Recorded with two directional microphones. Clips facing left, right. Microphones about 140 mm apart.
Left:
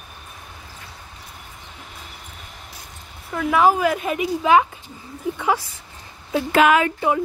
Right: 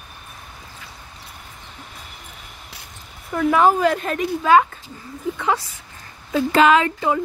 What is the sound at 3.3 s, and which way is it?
A woman's voice, 5° left (ahead or behind).